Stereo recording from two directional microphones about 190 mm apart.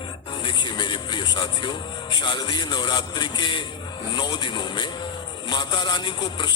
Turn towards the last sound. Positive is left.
turn(degrees=25)  # may be behind; listen again after turning